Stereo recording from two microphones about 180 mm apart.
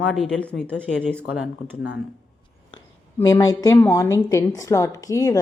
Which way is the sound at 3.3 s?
20° left (ahead or behind).